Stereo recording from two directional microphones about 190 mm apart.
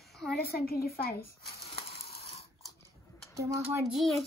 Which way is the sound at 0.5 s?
50° left (ahead or behind).